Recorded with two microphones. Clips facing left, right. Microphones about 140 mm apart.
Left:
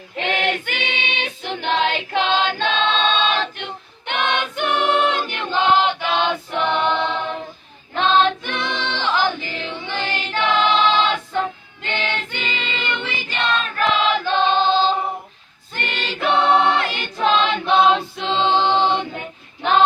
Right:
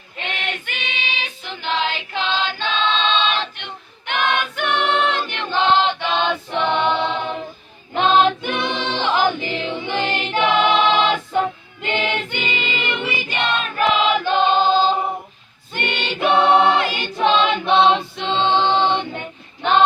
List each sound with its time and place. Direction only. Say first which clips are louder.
0.2 s choir: left 7 dB; 85° left
1.5 s choir: left 3 dB; 55° left (ahead or behind)
4.0 s choir: right 1 dB; 25° left (ahead or behind); by 7.3 s centre (ahead or behind)
7.9 s music: right 1 dB; 10° right (ahead or behind)
12.3 s choir: right 3 dB; 10° right (ahead or behind); by 19.2 s 10° left (ahead or behind)